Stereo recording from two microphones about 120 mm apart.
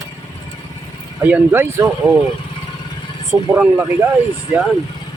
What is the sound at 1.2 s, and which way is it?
Speech, 15° right (ahead or behind).